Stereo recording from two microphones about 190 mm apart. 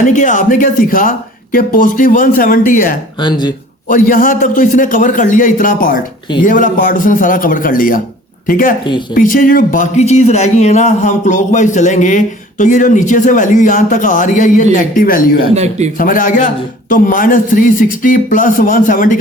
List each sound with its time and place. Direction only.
0.0 s a man's voice: 40° left (ahead or behind)
3.2 s speech: 25° left (ahead or behind)
3.8 s a man's voice: 45° left (ahead or behind)
15.5 s speech: 35° right (ahead or behind)
16.0 s a man's voice: 45° left (ahead or behind)